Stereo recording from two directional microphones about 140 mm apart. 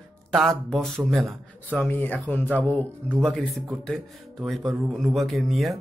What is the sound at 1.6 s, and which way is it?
Speech, 10° left (ahead or behind).